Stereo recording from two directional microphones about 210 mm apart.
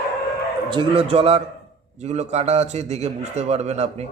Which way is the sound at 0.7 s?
25° right (ahead or behind).